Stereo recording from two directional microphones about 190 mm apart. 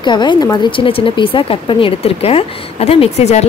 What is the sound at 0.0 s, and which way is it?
Speech, 25° left (ahead or behind).